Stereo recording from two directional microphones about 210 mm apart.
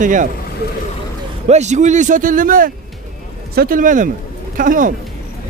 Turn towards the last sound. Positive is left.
turn(degrees=-40)  # may be behind; listen again after turning